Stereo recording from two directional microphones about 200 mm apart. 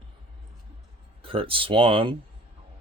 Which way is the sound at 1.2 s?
25° right (ahead or behind).